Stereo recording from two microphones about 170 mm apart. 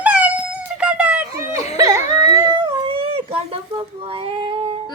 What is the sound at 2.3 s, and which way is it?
Cat, 25° right (ahead or behind).